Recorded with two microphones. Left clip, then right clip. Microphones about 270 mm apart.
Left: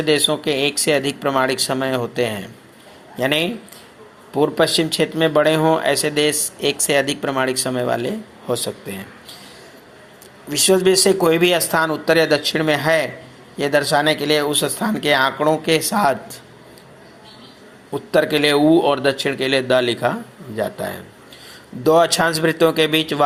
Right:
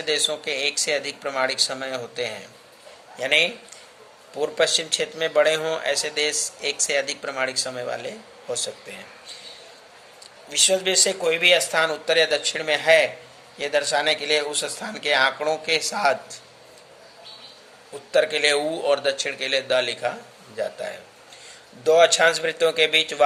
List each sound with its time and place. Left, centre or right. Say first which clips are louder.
0.0 s speech: left 6 dB; centre
10.5 s speech: left 5 dB; centre
18.1 s a man's voice: left 4 dB; centre